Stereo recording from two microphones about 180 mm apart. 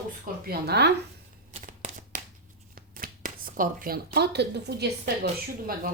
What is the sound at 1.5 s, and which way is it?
Shuffling cards, 40° right (ahead or behind).